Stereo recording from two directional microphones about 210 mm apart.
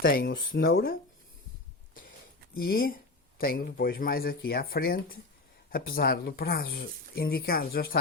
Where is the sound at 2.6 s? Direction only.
45° left (ahead or behind).